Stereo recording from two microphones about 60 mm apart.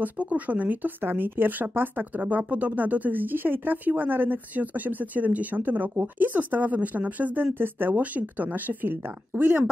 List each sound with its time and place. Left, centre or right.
0.0 s speech: right